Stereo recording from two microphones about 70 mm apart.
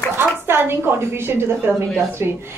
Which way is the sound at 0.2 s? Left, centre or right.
Right.